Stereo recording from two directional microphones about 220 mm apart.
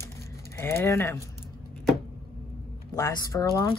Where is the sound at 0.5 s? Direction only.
10° left (ahead or behind).